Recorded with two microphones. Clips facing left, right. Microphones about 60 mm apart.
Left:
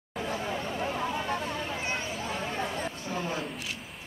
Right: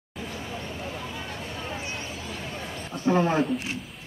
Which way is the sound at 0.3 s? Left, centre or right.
Left.